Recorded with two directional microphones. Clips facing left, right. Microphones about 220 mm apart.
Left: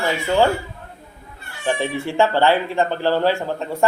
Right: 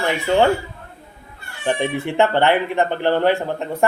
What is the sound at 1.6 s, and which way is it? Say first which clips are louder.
Speech: right 1 dB; 20° right (ahead or behind).